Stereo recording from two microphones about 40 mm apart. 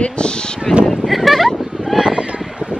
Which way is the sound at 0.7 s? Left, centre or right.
Centre.